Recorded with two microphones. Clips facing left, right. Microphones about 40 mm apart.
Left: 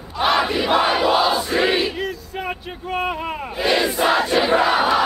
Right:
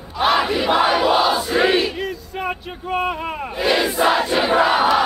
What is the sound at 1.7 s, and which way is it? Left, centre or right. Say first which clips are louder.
Speech: right 2 dB; centre.